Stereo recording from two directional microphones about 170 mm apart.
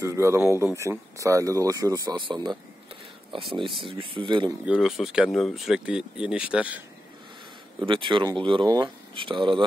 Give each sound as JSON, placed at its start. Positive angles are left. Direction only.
{"t": 0.0, "sound": "speech", "side_deg": -15}
{"t": 4.6, "sound": "speech", "side_deg": -5}
{"t": 7.8, "sound": "speech", "side_deg": -30}